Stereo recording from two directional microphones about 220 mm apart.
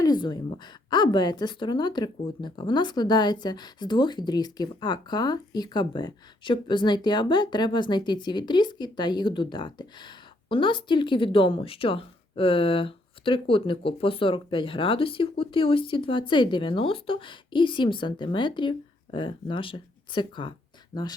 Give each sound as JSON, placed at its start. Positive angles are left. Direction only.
{"t": 0.0, "sound": "a woman's voice", "side_deg": 20}